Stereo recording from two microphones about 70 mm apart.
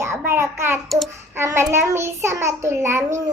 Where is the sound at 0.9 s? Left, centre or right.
Centre.